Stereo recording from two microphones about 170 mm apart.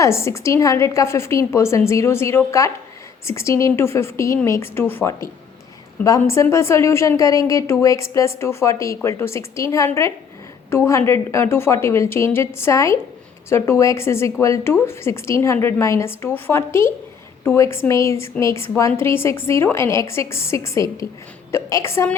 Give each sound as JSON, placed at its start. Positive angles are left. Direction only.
{"t": 0.0, "sound": "a woman's voice", "side_deg": 15}